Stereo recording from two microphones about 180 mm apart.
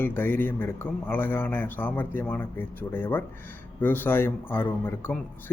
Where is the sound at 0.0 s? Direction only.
10° left (ahead or behind).